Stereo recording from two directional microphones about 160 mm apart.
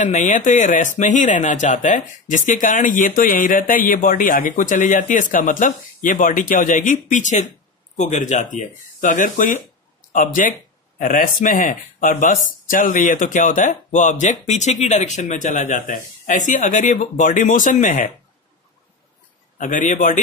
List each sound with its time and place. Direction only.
0.0 s speech: 50° left (ahead or behind)
19.6 s speech: 50° left (ahead or behind)